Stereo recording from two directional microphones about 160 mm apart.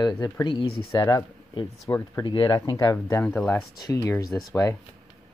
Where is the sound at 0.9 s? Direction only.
20° left (ahead or behind).